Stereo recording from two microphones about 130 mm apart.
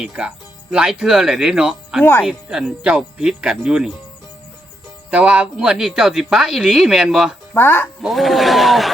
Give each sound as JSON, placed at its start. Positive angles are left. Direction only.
{"t": 0.0, "sound": "speech", "side_deg": -5}
{"t": 5.1, "sound": "speech", "side_deg": -10}
{"t": 7.5, "sound": "speech", "side_deg": 15}
{"t": 8.0, "sound": "speech", "side_deg": 0}